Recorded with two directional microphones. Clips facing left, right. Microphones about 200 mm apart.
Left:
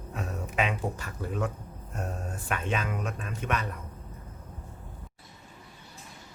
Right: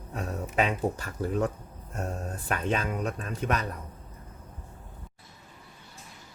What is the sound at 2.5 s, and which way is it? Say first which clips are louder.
Speech: right 2 dB; 40° right (ahead or behind).